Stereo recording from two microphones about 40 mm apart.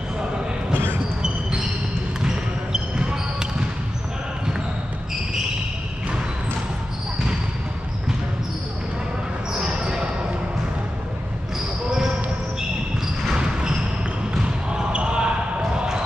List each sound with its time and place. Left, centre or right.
1.2 s a sound: right
9.5 s basketball bounce: right
13.4 s basketball bounce: right